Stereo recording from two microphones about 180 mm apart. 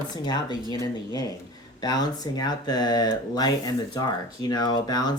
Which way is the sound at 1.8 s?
20° left (ahead or behind).